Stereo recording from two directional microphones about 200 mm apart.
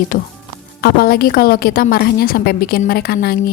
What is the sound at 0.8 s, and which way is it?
A woman's voice, 50° left (ahead or behind).